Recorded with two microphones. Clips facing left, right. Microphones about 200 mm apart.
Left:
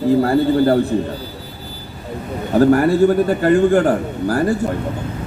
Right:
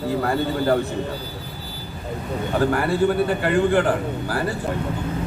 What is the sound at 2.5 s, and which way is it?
A man's voice, 40° left (ahead or behind).